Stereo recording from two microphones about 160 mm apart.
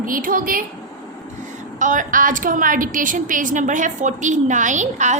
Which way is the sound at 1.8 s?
55° right (ahead or behind).